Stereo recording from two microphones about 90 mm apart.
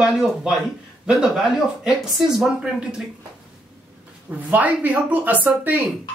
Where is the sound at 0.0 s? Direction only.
10° right (ahead or behind).